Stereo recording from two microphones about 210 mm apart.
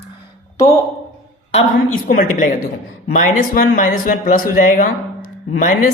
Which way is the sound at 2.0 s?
40° left (ahead or behind).